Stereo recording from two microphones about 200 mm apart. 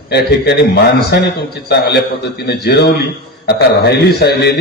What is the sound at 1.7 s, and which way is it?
A man's voice, 55° left (ahead or behind).